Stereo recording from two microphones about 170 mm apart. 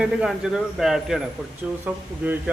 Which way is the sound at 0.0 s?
5° right (ahead or behind).